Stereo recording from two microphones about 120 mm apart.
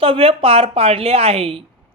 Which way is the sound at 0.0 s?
55° right (ahead or behind).